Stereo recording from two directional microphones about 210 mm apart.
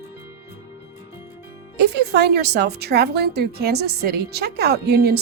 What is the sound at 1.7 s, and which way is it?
Speech, 50° right (ahead or behind).